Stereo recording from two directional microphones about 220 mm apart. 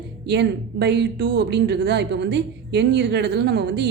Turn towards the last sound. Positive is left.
turn(degrees=-50)  # may be behind; listen again after turning